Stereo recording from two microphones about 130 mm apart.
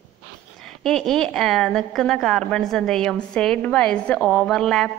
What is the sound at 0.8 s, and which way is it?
A woman's voice, 5° left (ahead or behind).